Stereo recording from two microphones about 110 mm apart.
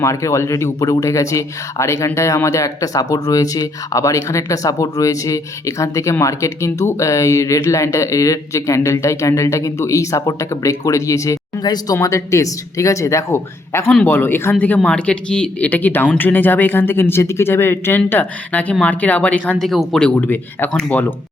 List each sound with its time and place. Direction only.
0.0 s speech: 25° left (ahead or behind)
11.9 s speech: 25° left (ahead or behind)
14.8 s speech: 10° left (ahead or behind)
19.6 s speech: centre (ahead or behind)
20.1 s speech: 20° left (ahead or behind)